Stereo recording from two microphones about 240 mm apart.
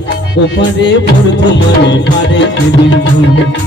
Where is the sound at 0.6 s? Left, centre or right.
Left.